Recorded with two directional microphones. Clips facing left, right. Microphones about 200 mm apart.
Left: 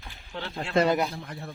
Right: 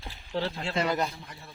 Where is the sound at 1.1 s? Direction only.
60° left (ahead or behind).